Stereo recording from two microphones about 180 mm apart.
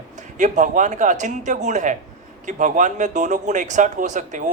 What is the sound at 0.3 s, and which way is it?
Speech, 45° right (ahead or behind).